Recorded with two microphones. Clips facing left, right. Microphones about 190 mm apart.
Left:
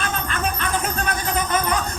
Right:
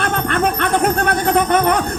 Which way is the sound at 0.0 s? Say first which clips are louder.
Right 8 dB; 65° right (ahead or behind).